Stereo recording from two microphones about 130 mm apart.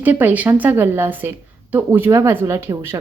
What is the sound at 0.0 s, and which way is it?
Speech, 15° right (ahead or behind).